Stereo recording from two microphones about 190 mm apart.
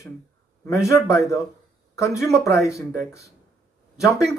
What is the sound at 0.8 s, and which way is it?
Speech, 15° left (ahead or behind).